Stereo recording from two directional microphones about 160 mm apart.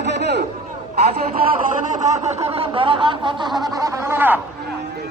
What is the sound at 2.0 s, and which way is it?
Snicker, 45° right (ahead or behind).